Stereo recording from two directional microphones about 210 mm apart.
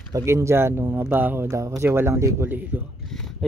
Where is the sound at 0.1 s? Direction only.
15° right (ahead or behind).